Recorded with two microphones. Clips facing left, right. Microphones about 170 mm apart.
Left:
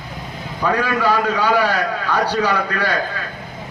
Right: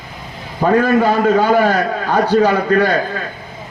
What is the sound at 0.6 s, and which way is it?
A man's voice, 45° right (ahead or behind).